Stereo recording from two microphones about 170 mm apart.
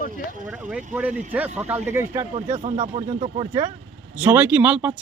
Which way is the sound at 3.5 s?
20° right (ahead or behind).